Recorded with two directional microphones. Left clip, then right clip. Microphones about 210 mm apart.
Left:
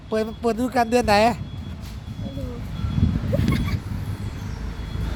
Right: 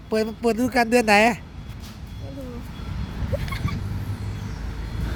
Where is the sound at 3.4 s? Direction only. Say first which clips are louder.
Left 5 dB; 15° left (ahead or behind).